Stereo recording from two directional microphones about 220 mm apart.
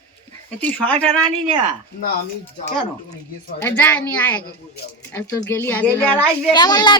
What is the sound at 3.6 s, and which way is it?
Speech, 10° left (ahead or behind).